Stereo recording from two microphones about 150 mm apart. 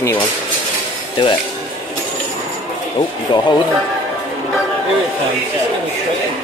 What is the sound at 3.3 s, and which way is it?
Speech, 30° left (ahead or behind).